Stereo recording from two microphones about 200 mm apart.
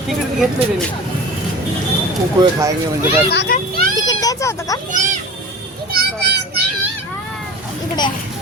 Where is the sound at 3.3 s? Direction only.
55° left (ahead or behind).